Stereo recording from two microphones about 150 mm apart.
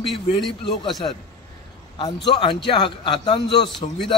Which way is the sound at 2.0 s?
30° left (ahead or behind).